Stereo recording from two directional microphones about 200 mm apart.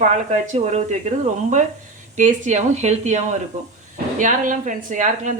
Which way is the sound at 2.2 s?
35° right (ahead or behind).